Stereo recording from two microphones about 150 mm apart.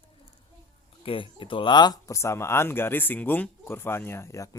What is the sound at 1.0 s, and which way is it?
Speech, 35° left (ahead or behind).